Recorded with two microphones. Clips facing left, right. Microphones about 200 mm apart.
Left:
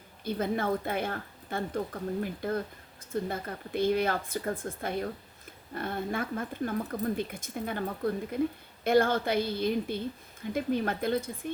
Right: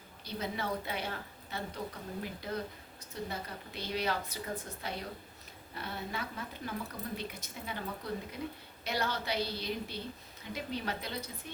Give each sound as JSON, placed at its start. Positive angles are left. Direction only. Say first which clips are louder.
{"t": 0.3, "sound": "speech", "louder": "left 8 dB", "side_deg": 50}